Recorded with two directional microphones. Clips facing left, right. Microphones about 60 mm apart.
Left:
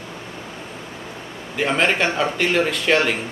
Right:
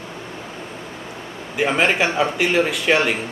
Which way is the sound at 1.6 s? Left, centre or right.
Centre.